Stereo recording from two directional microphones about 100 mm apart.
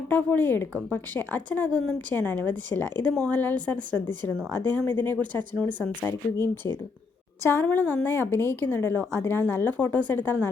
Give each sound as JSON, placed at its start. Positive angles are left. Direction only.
{"t": 0.1, "sound": "a woman's voice", "side_deg": 15}